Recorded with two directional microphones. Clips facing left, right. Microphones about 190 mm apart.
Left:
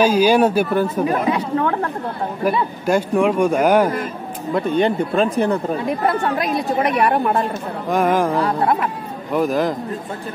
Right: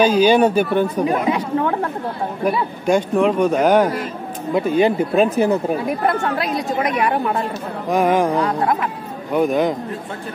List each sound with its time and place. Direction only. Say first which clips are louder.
0.0 s a man's voice: right 1 dB; 10° left (ahead or behind)
1.0 s chatter: even; 15° right (ahead or behind)
2.4 s a man's voice: even; 5° left (ahead or behind)
4.6 s speech: right 2 dB; 5° right (ahead or behind)
7.9 s speech: right 1 dB; centre (ahead or behind)